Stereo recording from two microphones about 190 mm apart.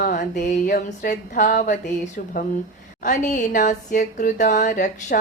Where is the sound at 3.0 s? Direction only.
45° left (ahead or behind).